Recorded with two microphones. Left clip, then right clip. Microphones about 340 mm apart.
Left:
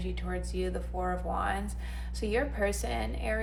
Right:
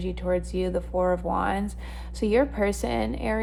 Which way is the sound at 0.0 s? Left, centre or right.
Right.